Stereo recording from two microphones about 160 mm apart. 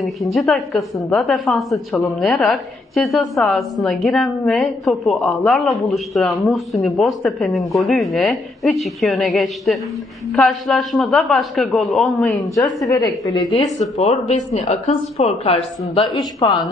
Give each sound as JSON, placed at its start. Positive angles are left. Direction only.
{"t": 0.0, "sound": "a woman's voice", "side_deg": 0}
{"t": 12.2, "sound": "a woman's voice", "side_deg": 20}
{"t": 13.5, "sound": "a woman's voice", "side_deg": 40}
{"t": 15.9, "sound": "a woman's voice", "side_deg": 30}